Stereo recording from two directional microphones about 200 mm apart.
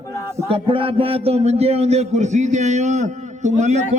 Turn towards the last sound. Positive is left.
turn(degrees=-35)  # may be behind; listen again after turning